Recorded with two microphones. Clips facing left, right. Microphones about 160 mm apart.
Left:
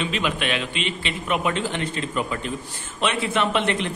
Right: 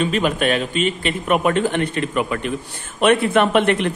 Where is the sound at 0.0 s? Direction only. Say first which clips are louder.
Right 6 dB; 45° right (ahead or behind).